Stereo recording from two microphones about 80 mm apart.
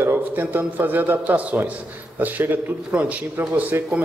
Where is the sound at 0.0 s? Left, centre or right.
Right.